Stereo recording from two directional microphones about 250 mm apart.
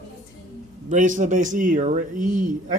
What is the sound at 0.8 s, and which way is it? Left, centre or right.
Speech, right.